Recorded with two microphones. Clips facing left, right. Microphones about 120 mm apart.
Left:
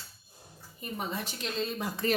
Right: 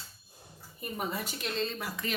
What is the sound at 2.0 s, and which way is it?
Speech, 40° left (ahead or behind).